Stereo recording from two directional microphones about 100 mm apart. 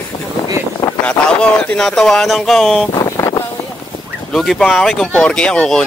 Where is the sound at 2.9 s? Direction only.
45° left (ahead or behind).